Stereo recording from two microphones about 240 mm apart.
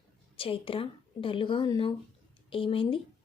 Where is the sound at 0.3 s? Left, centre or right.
Left.